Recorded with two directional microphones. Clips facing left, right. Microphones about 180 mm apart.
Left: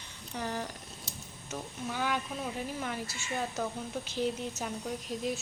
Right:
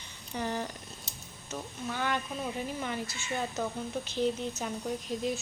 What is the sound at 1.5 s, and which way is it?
Speech, 10° left (ahead or behind).